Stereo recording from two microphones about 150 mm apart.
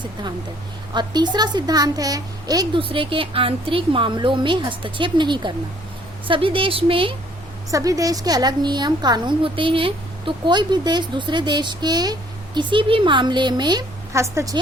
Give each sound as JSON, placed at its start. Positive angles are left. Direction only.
{"t": 0.9, "sound": "a woman's voice", "side_deg": -30}
{"t": 7.7, "sound": "a woman's voice", "side_deg": -20}